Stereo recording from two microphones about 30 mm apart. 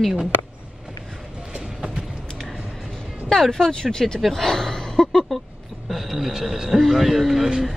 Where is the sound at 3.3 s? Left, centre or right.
Centre.